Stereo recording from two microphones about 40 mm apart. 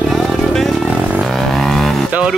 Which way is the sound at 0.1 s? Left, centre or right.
Centre.